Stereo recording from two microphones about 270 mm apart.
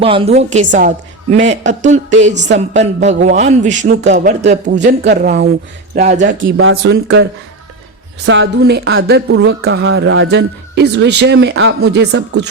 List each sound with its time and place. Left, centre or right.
0.0 s speech: centre
6.2 s speech: right
8.3 s speech: right